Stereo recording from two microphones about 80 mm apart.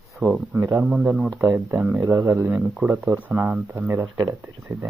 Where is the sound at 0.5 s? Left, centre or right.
Right.